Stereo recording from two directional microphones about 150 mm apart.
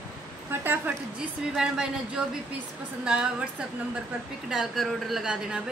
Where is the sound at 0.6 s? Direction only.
15° right (ahead or behind).